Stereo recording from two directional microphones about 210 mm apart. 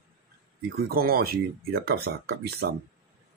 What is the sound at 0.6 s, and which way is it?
Speech, 50° right (ahead or behind).